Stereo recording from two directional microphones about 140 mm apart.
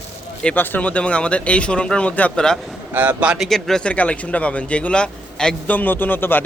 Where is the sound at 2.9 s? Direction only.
15° right (ahead or behind).